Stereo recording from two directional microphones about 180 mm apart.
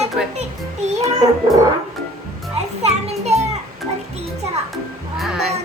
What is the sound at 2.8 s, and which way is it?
Music, 35° right (ahead or behind).